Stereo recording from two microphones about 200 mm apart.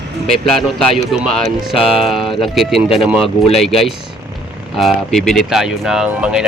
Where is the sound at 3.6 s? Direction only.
Centre (ahead or behind).